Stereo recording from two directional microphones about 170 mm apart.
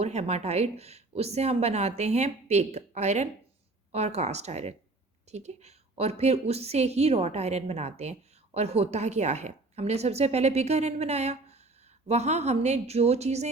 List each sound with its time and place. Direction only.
0.0 s speech: 40° right (ahead or behind)